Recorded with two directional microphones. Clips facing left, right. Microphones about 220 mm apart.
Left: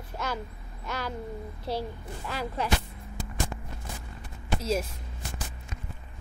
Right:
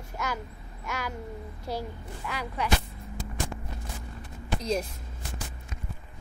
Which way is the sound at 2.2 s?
35° left (ahead or behind).